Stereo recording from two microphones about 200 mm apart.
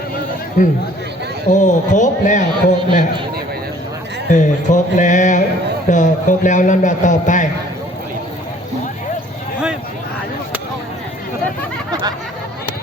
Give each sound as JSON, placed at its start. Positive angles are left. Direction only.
{"t": 0.6, "sound": "a man's voice", "side_deg": 40}
{"t": 4.3, "sound": "a man's voice", "side_deg": 40}